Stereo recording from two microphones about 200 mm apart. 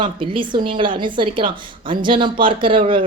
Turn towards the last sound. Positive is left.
turn(degrees=-25)  # may be behind; listen again after turning